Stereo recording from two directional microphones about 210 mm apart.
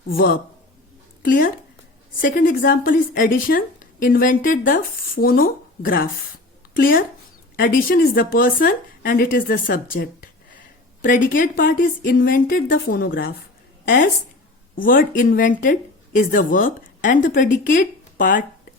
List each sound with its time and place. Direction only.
0.1 s a woman's voice: 45° left (ahead or behind)